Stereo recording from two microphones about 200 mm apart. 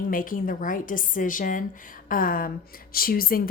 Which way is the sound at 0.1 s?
45° left (ahead or behind).